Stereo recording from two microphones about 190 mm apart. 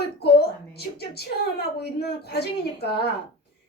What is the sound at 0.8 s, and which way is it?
Speech, 60° left (ahead or behind).